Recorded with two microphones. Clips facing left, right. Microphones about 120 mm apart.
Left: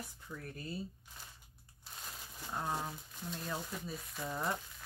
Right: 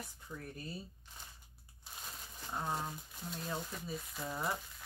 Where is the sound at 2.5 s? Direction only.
Centre (ahead or behind).